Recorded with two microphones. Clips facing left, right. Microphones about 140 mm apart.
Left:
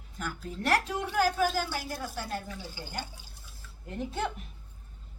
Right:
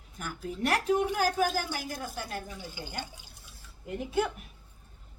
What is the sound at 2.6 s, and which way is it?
Speech, 15° right (ahead or behind).